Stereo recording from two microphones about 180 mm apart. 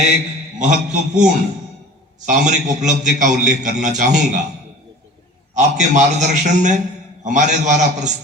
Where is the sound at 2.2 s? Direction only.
45° right (ahead or behind).